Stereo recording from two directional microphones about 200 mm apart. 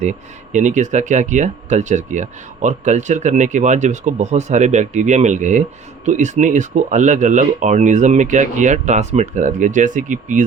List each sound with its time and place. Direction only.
0.0 s speech: 35° right (ahead or behind)